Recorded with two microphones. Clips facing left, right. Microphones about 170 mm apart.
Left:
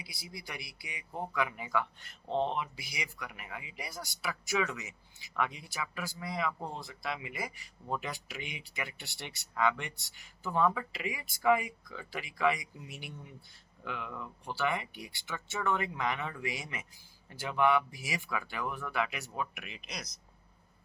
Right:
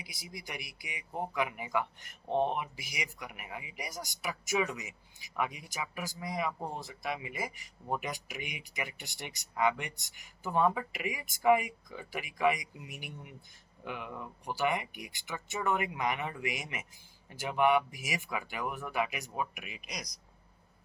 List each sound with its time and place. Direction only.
0.0 s speech: 20° right (ahead or behind)